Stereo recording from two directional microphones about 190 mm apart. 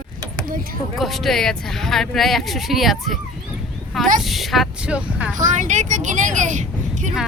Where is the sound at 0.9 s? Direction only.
Centre (ahead or behind).